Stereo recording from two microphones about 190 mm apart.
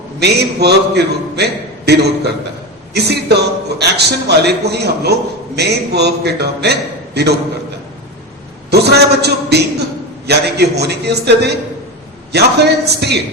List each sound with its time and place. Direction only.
0.2 s a man's voice: 60° right (ahead or behind)
8.7 s a man's voice: 60° right (ahead or behind)